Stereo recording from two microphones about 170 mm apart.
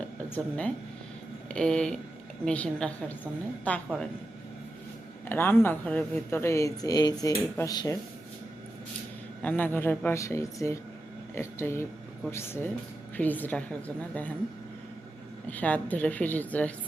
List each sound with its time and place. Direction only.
0.3 s speech: 10° left (ahead or behind)
5.3 s speech: 15° left (ahead or behind)
9.4 s speech: 10° left (ahead or behind)
15.4 s speech: 10° left (ahead or behind)